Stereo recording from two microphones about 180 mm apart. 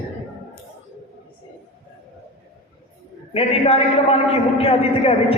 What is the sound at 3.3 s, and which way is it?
A man's voice, 35° left (ahead or behind).